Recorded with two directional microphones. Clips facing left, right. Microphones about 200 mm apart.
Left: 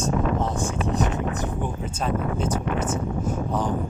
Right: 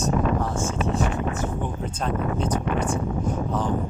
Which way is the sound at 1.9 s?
5° left (ahead or behind).